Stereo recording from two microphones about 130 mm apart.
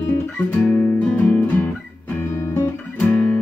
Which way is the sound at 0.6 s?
15° left (ahead or behind).